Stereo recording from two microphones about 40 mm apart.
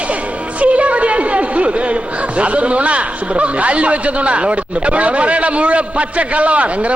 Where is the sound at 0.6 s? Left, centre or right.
Right.